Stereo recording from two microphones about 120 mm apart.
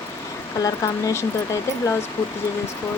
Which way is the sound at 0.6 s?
25° left (ahead or behind).